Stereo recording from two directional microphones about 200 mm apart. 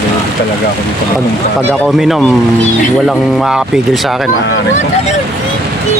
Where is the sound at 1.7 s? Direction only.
Centre (ahead or behind).